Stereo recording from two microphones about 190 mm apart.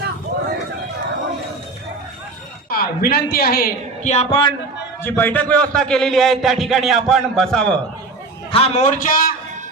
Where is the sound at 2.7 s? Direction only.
55° left (ahead or behind).